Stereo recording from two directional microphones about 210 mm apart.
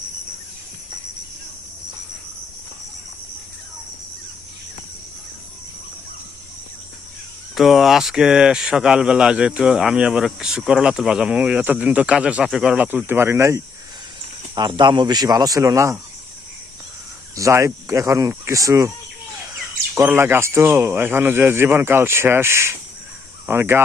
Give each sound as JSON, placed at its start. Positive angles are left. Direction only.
{"t": 7.5, "sound": "speech", "side_deg": 0}
{"t": 17.3, "sound": "speech", "side_deg": -15}
{"t": 20.0, "sound": "speech", "side_deg": -10}